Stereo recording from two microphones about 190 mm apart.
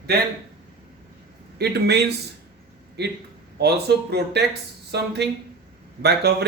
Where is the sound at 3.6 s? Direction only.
60° right (ahead or behind).